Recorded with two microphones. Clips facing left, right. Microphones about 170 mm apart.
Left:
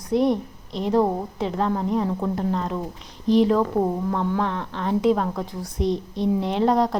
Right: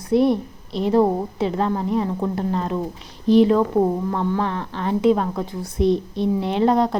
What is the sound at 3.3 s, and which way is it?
A woman's voice, 5° right (ahead or behind).